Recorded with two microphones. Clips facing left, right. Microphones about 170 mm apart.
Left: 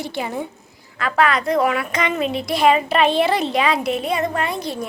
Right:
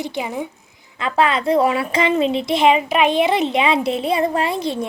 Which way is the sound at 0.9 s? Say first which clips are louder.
Even; 25° right (ahead or behind).